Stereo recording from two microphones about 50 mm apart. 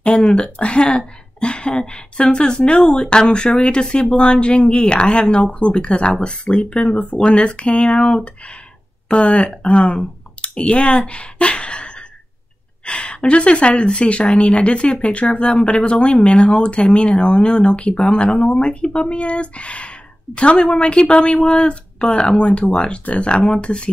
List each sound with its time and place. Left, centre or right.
0.0 s speech: centre